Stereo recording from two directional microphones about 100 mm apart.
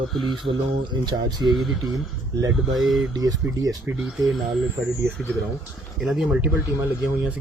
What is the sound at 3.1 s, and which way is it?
Speech, 40° right (ahead or behind).